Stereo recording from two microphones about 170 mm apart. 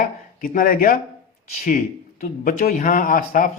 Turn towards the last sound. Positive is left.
turn(degrees=50)  # may be behind; listen again after turning